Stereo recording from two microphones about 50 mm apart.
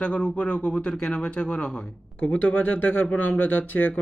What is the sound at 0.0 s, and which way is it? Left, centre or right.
Speech, left.